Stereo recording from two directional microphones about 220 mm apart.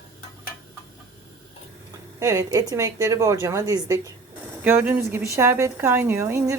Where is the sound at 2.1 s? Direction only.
15° right (ahead or behind).